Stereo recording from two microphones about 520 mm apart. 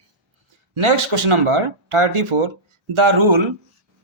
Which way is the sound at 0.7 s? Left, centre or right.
Right.